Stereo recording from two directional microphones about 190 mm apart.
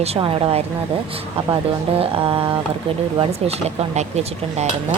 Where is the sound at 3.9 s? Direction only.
35° right (ahead or behind).